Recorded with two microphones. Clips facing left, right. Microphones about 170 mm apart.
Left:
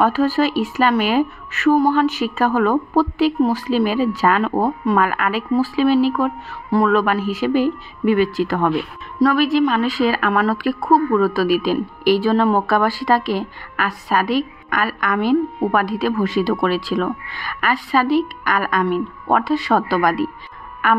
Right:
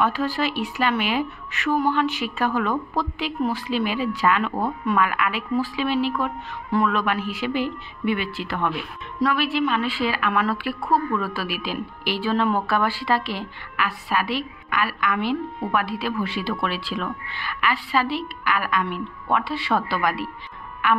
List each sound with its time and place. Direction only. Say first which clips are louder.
0.0 s a woman's voice: left 7 dB; 40° left (ahead or behind)